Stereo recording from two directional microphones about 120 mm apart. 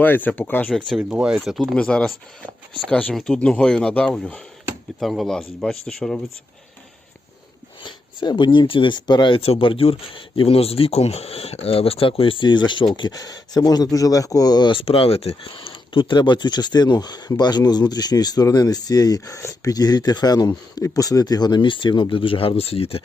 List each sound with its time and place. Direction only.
0.0 s speech: 15° left (ahead or behind)
0.7 s speech: 5° left (ahead or behind)
1.1 s speech: 5° right (ahead or behind)
7.8 s speech: 40° left (ahead or behind)